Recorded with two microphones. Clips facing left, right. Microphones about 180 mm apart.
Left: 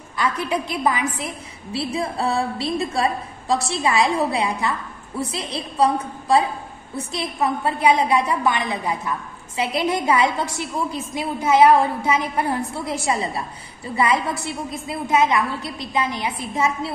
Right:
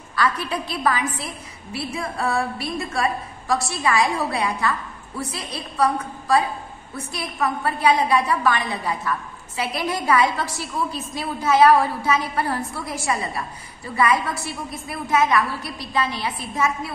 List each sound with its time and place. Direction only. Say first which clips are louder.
0.1 s a woman's voice: left 1 dB; 20° left (ahead or behind)